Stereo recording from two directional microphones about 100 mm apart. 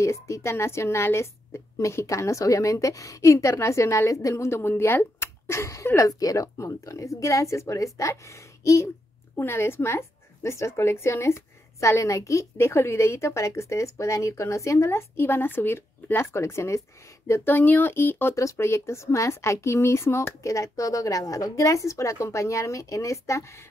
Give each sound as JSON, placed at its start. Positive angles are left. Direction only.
{"t": 0.0, "sound": "a woman's voice", "side_deg": 30}